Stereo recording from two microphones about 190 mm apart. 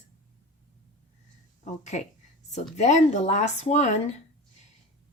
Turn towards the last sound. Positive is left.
turn(degrees=40)  # may be behind; listen again after turning